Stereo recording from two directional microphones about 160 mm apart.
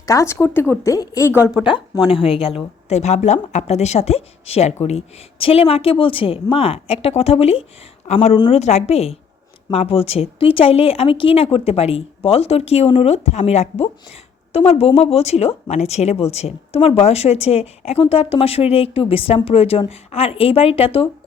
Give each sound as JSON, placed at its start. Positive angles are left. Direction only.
{"t": 0.0, "sound": "speech", "side_deg": 20}
{"t": 2.0, "sound": "speech", "side_deg": 35}